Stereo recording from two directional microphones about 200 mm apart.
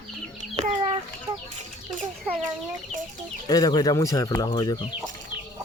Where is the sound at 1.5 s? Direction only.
40° right (ahead or behind).